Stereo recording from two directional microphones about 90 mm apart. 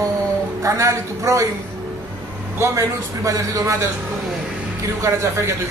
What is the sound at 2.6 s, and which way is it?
A man's voice, 35° right (ahead or behind).